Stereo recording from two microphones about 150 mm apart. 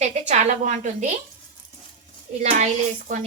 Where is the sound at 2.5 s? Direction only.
55° right (ahead or behind).